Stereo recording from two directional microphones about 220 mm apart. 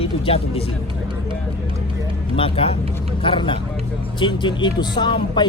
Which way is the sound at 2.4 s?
25° left (ahead or behind).